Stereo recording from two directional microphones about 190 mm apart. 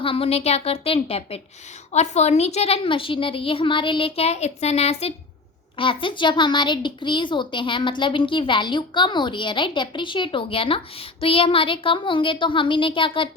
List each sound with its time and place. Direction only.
0.0 s a child's voice: 30° left (ahead or behind)